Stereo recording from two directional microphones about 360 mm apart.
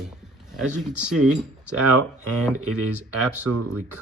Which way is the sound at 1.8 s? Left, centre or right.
Right.